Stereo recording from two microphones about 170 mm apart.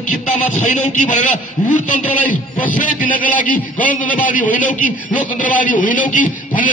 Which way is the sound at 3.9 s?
50° left (ahead or behind).